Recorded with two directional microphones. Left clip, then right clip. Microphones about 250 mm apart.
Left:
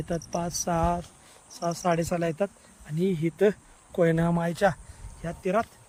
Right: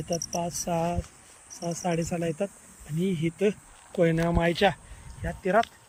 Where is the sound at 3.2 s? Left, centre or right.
Left.